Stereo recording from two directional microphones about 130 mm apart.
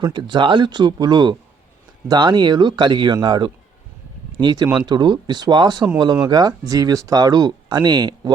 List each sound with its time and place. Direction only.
0.0 s speech: 35° right (ahead or behind)